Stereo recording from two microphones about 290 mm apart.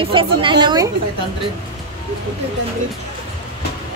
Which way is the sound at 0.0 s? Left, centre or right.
Centre.